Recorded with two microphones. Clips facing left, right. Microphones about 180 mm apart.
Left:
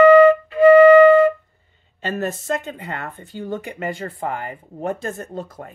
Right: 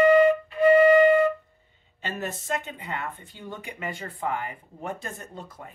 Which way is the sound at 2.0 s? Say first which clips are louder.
Left 8 dB; 45° left (ahead or behind).